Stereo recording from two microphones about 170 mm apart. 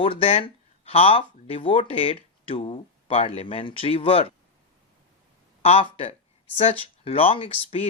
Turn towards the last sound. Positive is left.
turn(degrees=35)  # may be behind; listen again after turning